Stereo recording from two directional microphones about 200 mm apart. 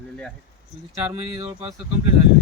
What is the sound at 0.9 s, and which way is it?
Speech, 5° right (ahead or behind).